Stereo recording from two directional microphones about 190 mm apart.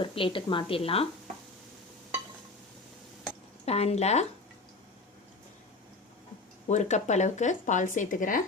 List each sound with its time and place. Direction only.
0.0 s a woman's voice: 30° left (ahead or behind)
3.7 s speech: 35° left (ahead or behind)
6.7 s speech: 40° left (ahead or behind)